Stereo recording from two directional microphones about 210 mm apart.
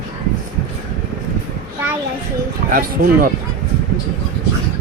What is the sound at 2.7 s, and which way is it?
Speech, 45° right (ahead or behind).